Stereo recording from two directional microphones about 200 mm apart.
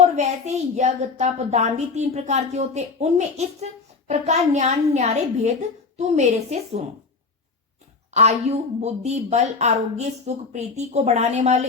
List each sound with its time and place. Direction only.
0.0 s a woman's voice: 35° right (ahead or behind)
8.1 s a woman's voice: 35° right (ahead or behind)